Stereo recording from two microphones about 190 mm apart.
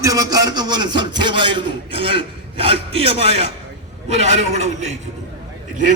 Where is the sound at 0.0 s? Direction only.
20° right (ahead or behind); by 4.7 s 35° right (ahead or behind).